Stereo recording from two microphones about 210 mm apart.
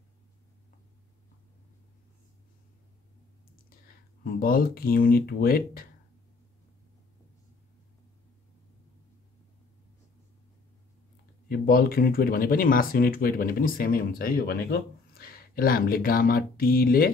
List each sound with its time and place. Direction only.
3.8 s speech: 45° left (ahead or behind)
11.4 s speech: 45° left (ahead or behind)